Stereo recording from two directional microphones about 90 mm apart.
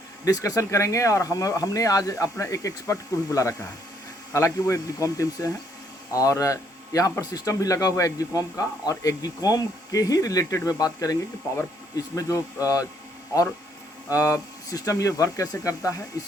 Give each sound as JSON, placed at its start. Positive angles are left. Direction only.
{"t": 0.3, "sound": "speech", "side_deg": 40}
{"t": 14.1, "sound": "speech", "side_deg": 40}